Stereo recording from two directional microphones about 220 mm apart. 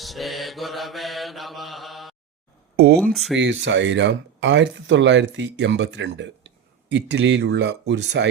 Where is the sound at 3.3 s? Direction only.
55° right (ahead or behind).